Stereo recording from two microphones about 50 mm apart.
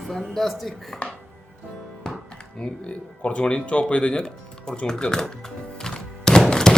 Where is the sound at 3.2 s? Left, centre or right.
Left.